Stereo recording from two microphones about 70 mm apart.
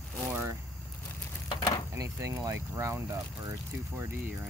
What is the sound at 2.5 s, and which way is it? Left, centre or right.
Speech, right.